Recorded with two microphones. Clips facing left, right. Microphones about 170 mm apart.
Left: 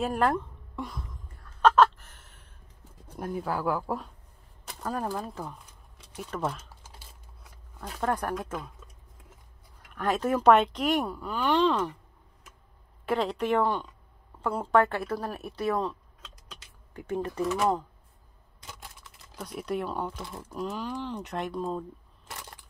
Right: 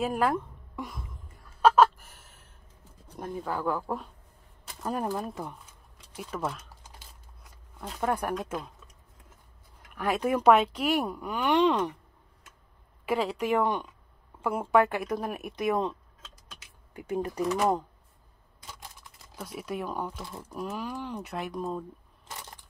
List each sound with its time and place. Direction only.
0.0 s a sound: 5° right (ahead or behind)
3.2 s speech: 5° left (ahead or behind)
4.8 s speech: 15° right (ahead or behind)
8.0 s speech: 10° right (ahead or behind)
9.9 s speech: 10° right (ahead or behind)
13.0 s speech: 10° right (ahead or behind)
19.3 s speech: 5° right (ahead or behind)